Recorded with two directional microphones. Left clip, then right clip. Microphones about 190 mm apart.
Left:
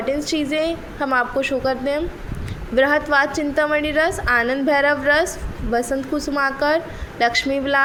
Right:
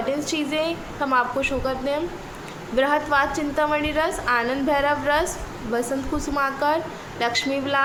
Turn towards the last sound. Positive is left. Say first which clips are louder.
# left 4 dB
turn(degrees=30)  # may be behind; listen again after turning